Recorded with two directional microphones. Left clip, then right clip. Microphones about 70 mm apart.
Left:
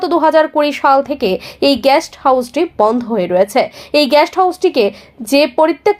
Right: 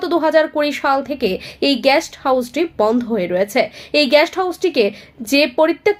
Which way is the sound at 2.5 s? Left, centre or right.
Centre.